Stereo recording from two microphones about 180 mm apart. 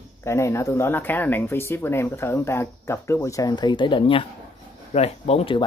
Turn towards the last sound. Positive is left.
turn(degrees=35)  # may be behind; listen again after turning